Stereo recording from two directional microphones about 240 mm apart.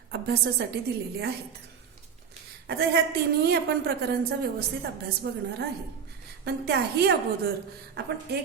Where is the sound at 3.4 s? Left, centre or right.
Right.